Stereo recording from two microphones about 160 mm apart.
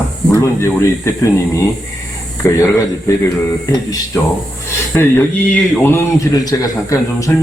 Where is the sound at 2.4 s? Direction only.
15° left (ahead or behind).